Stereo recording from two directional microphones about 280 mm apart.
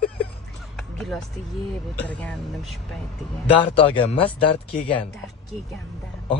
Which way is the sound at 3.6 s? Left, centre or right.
Centre.